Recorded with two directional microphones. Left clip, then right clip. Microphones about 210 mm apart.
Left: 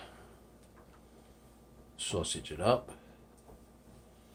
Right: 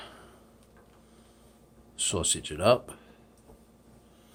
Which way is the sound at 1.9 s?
45° right (ahead or behind).